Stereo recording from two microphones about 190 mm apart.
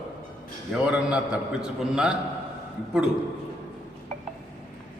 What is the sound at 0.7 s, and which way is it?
A man's voice, 5° right (ahead or behind).